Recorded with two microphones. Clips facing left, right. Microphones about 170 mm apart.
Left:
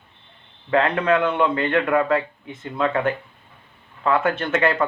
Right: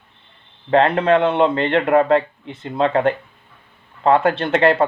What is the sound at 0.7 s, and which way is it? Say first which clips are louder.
A man's voice: right 4 dB; 30° right (ahead or behind).